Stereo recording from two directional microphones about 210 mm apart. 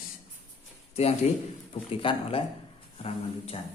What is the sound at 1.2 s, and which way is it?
Speech, 35° left (ahead or behind).